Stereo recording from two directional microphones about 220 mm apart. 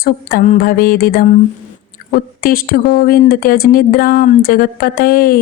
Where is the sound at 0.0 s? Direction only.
40° left (ahead or behind).